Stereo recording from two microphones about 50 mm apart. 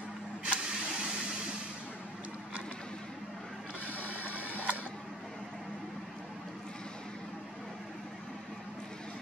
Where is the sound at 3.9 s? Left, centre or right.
Left.